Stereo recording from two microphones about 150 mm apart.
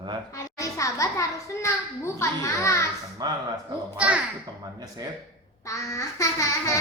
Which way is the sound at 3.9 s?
10° right (ahead or behind).